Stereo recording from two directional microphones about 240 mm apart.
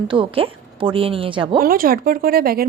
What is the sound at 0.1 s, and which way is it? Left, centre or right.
A woman's voice, right.